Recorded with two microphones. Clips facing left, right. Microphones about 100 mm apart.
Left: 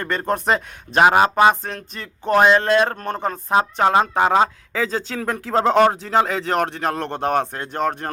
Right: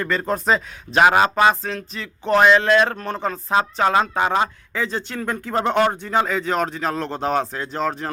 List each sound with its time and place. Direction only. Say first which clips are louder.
0.0 s speech: even; 50° left (ahead or behind)
0.9 s speech: left 1 dB; 40° left (ahead or behind)
1.5 s speech: left 1 dB; 50° left (ahead or behind)
3.3 s speech: left 2 dB; 20° left (ahead or behind)
4.1 s speech: left 3 dB; 60° left (ahead or behind)